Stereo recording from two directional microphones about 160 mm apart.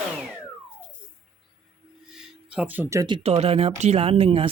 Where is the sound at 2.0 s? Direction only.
5° right (ahead or behind).